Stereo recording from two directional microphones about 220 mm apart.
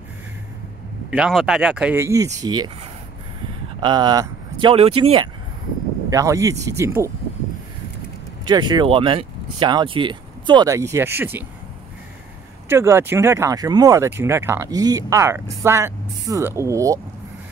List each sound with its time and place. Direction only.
1.1 s speech: 5° right (ahead or behind)
3.8 s speech: 20° right (ahead or behind)
6.0 s speech: 15° right (ahead or behind)
8.5 s speech: 20° right (ahead or behind)
12.6 s speech: 10° right (ahead or behind)